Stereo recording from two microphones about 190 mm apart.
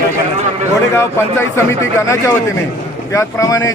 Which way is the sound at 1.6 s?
15° left (ahead or behind).